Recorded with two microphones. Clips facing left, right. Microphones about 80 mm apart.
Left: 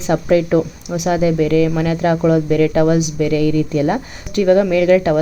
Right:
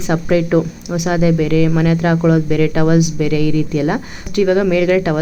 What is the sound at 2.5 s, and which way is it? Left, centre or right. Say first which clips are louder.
A woman's voice: even; left.